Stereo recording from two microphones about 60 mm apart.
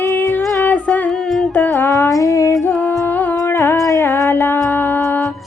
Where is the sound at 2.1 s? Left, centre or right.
Left.